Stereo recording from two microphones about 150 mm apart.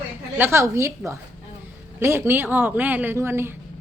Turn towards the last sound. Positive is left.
turn(degrees=-15)  # may be behind; listen again after turning